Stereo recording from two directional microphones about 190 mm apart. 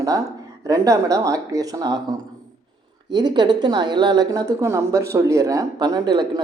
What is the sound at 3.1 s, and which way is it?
A woman's voice, 25° right (ahead or behind).